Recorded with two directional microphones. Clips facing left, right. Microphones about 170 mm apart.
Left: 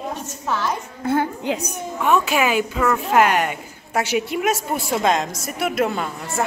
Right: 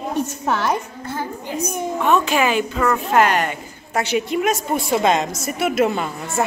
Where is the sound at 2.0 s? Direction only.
5° left (ahead or behind).